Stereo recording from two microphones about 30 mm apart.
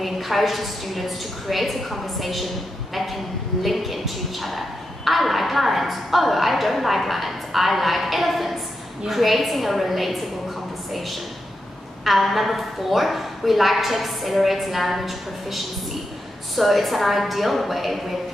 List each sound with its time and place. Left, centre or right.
0.0 s speech: centre
3.6 s speech: centre
12.0 s speech: centre